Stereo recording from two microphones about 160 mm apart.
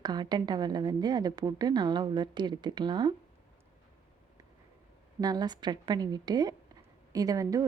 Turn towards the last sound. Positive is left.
turn(degrees=-20)  # may be behind; listen again after turning